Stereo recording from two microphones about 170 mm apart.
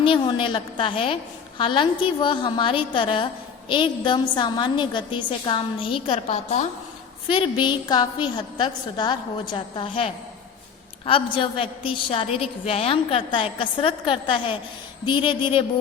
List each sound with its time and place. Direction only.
0.0 s a woman's voice: 30° left (ahead or behind)
7.3 s a woman's voice: 30° left (ahead or behind)